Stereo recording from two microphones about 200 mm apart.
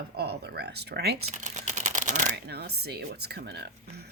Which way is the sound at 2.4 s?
55° right (ahead or behind).